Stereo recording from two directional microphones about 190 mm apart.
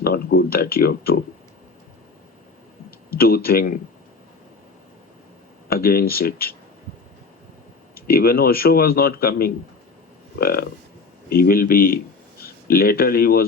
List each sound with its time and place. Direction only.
0.0 s speech: 55° left (ahead or behind)
3.1 s speech: 50° left (ahead or behind)
5.6 s speech: 50° left (ahead or behind)
7.9 s speech: 50° left (ahead or behind)